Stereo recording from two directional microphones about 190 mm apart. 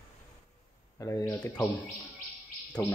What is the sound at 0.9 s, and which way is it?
Speech, 15° left (ahead or behind).